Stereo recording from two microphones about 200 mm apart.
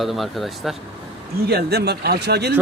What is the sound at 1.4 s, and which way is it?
Speech, 55° right (ahead or behind).